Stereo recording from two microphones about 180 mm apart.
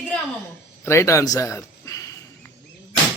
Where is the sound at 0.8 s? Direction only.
15° left (ahead or behind).